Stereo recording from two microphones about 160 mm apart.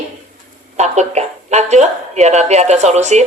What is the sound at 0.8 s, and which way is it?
A woman's voice, 45° right (ahead or behind).